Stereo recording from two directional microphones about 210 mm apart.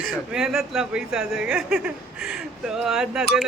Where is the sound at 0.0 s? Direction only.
Centre (ahead or behind).